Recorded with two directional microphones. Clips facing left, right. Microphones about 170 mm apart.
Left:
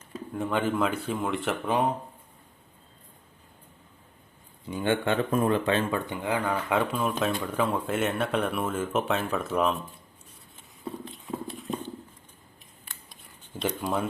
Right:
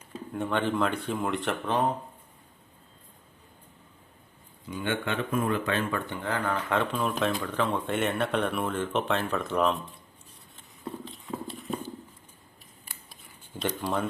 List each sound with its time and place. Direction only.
0.3 s speech: centre (ahead or behind)
4.7 s speech: 35° left (ahead or behind); by 9.9 s 5° left (ahead or behind)
11.0 s horse: centre (ahead or behind)
13.6 s speech: centre (ahead or behind)